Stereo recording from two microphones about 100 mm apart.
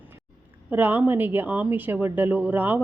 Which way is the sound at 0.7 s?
20° right (ahead or behind).